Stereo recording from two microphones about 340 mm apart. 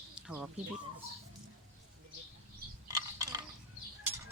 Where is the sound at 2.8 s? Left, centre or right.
Centre.